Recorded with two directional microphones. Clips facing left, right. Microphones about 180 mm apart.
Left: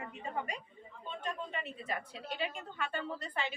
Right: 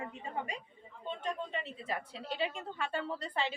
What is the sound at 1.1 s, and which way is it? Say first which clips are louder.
A woman's voice: right 3 dB; 25° right (ahead or behind).